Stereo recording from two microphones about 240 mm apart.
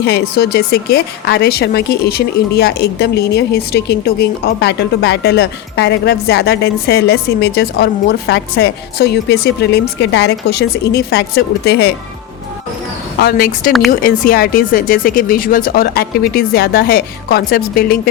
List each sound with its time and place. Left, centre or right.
0.0 s a woman's voice: left
13.1 s speech: left